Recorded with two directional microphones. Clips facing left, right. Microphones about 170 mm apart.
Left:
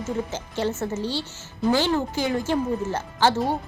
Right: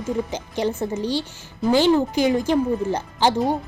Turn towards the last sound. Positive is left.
turn(degrees=-15)  # may be behind; listen again after turning